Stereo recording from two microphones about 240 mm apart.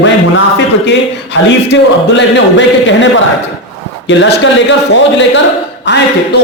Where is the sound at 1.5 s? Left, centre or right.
Left.